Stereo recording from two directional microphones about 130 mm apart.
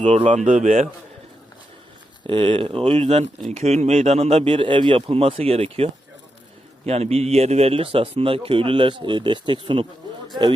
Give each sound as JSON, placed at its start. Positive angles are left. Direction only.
{"t": 0.0, "sound": "speech", "side_deg": -45}
{"t": 0.3, "sound": "speech", "side_deg": -70}
{"t": 2.2, "sound": "speech", "side_deg": -40}